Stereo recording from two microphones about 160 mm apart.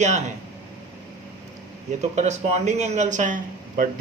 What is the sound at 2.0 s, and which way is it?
Speech, 45° right (ahead or behind).